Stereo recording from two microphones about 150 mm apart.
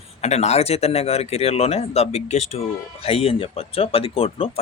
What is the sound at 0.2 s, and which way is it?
Speech, 45° left (ahead or behind).